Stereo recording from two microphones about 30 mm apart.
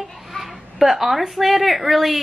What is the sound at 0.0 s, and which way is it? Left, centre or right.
Speech, centre.